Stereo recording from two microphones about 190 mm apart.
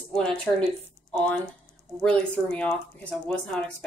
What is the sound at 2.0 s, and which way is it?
A woman's voice, 5° left (ahead or behind).